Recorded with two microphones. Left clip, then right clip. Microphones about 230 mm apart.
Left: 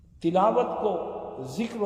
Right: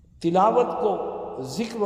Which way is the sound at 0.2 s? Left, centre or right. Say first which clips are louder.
Right 3 dB; right.